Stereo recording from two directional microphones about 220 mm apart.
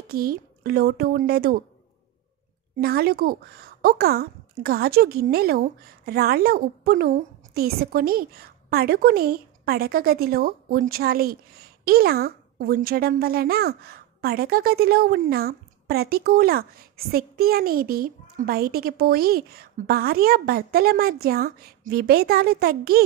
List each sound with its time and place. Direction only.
0.1 s a woman's voice: 45° right (ahead or behind)
2.8 s a woman's voice: 45° right (ahead or behind)